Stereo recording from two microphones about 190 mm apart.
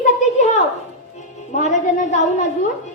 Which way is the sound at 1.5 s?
40° left (ahead or behind).